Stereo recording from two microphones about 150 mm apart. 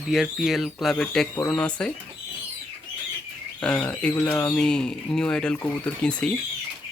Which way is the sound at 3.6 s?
5° left (ahead or behind).